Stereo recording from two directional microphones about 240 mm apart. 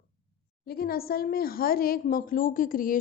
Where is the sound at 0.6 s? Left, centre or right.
Left.